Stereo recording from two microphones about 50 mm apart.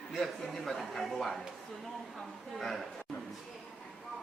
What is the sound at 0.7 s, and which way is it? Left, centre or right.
Speech, centre.